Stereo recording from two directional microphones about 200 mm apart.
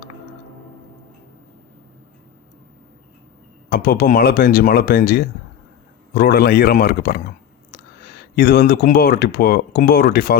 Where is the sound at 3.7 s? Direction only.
45° left (ahead or behind).